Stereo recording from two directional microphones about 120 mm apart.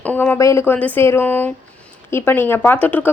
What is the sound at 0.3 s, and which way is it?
Speech, 25° left (ahead or behind).